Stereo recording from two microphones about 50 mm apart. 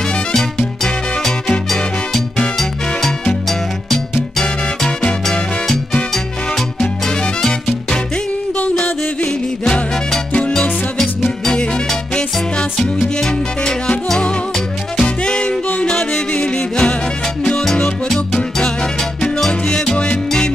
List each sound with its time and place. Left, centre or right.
0.3 s music: centre
3.4 s music: centre
4.4 s music: centre
10.5 s music: centre